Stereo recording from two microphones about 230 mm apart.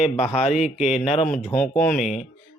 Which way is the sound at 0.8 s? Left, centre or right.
Left.